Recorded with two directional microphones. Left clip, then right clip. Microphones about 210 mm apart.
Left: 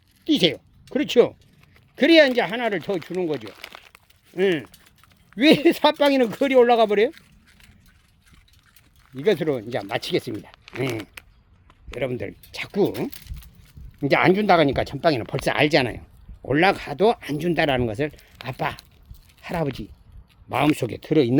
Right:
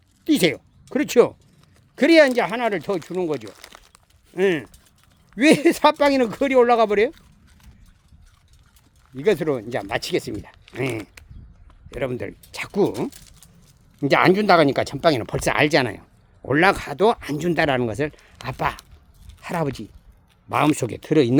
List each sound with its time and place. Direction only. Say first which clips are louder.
0.3 s speech: right 1 dB; 15° right (ahead or behind)
3.4 s crumpling: left 2 dB; 25° left (ahead or behind)
4.4 s speech: right 1 dB; 5° right (ahead or behind)
7.1 s a sound: even; 35° right (ahead or behind)
9.2 s speech: right 1 dB; 5° right (ahead or behind)